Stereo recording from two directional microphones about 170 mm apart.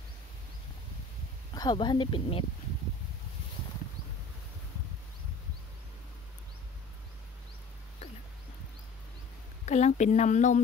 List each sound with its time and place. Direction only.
1.5 s speech: 25° left (ahead or behind)
9.7 s speech: 40° left (ahead or behind)